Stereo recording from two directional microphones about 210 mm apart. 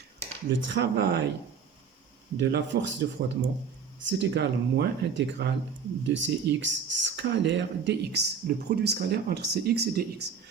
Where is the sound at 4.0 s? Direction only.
60° right (ahead or behind).